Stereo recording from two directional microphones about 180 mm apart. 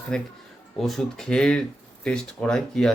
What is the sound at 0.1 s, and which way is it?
Mantra, 5° left (ahead or behind).